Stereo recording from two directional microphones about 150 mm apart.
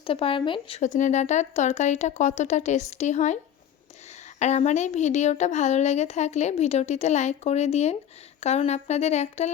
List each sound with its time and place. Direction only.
0.0 s speech: 35° left (ahead or behind)
0.8 s speech: 55° left (ahead or behind)
4.4 s speech: 50° left (ahead or behind)